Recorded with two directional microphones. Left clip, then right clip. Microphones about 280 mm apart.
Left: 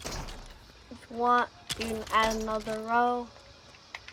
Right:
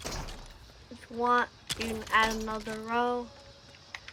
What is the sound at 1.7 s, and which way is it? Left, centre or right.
Speech, centre.